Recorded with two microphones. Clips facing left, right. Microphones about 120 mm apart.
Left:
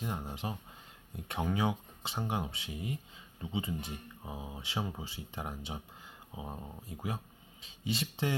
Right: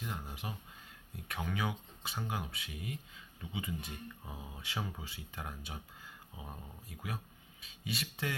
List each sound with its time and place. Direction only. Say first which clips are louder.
0.0 s speech: left 5 dB; 25° left (ahead or behind)